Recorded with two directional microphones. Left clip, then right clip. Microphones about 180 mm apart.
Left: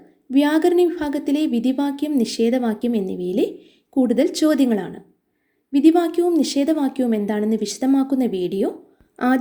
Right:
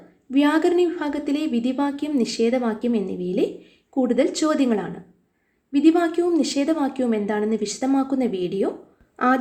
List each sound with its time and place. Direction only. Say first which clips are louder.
0.3 s a woman's voice: left 2 dB; 40° left (ahead or behind)